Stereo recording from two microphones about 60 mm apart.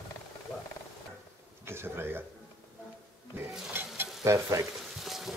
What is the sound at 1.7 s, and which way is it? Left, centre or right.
Speech, right.